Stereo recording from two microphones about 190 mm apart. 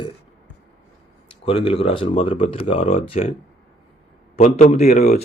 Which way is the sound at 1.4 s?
30° left (ahead or behind).